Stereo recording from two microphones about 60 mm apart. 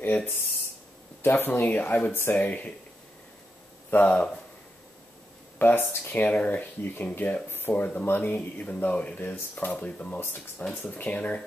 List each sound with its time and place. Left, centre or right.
0.0 s a sound: left
1.2 s speech: left
3.9 s speech: left
5.6 s speech: left
6.8 s speech: left
7.4 s speech: left